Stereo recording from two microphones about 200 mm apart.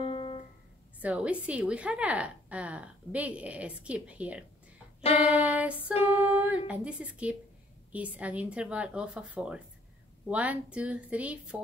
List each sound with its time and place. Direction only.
0.0 s music: 30° left (ahead or behind)
1.0 s a woman's voice: 5° right (ahead or behind)